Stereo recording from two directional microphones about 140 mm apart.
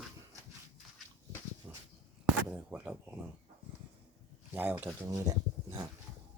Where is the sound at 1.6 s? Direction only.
15° right (ahead or behind).